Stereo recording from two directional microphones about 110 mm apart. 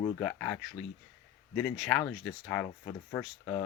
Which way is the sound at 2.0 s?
10° left (ahead or behind).